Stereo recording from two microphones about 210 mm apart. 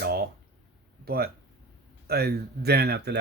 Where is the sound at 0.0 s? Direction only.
50° right (ahead or behind).